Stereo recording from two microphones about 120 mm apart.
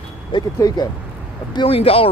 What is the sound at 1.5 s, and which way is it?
Speech, 45° left (ahead or behind).